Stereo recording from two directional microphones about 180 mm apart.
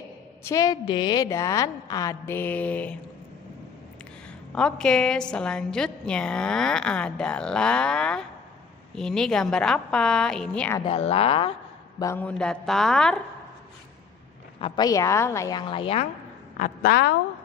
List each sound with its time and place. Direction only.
0.4 s a woman's voice: 15° left (ahead or behind)
4.5 s a woman's voice: 5° left (ahead or behind)
10.9 s speech: 35° left (ahead or behind)
12.0 s a woman's voice: 10° left (ahead or behind)
14.6 s a woman's voice: 20° left (ahead or behind)
15.7 s speech: 30° left (ahead or behind)
16.5 s a woman's voice: 50° left (ahead or behind)